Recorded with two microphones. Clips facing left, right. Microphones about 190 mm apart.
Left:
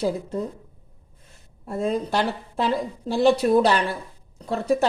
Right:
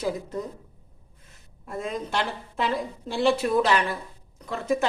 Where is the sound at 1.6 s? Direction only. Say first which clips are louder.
Left 6 dB; 30° left (ahead or behind).